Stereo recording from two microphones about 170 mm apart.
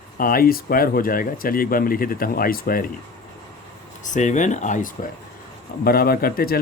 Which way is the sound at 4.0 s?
45° left (ahead or behind).